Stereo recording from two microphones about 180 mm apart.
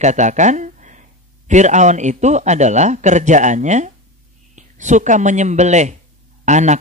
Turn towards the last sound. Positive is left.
turn(degrees=-40)  # may be behind; listen again after turning